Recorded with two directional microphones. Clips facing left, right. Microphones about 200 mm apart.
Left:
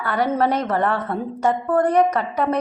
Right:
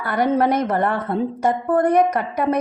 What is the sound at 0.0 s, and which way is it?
A woman's voice, 15° right (ahead or behind).